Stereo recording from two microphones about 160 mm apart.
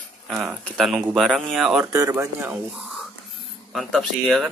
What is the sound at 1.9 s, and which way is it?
Speech, 20° right (ahead or behind).